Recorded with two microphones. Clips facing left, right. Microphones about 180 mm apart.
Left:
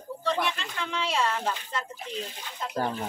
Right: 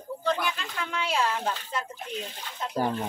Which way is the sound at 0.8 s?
5° right (ahead or behind).